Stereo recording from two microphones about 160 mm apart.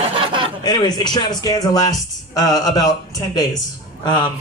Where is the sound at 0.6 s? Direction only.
25° left (ahead or behind).